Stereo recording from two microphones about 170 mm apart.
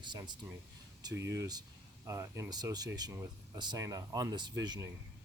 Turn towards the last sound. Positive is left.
turn(degrees=-20)  # may be behind; listen again after turning